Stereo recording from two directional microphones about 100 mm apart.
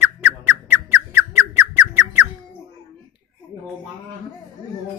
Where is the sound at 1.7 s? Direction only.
15° right (ahead or behind).